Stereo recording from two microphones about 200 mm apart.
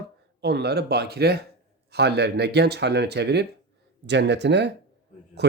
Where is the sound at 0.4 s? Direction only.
55° right (ahead or behind).